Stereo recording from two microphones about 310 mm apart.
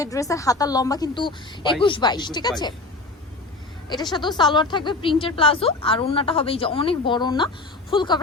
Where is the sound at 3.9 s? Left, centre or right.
Centre.